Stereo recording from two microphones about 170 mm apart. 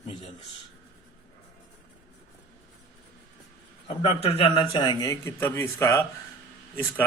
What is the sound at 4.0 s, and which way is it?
A man's voice, 35° left (ahead or behind).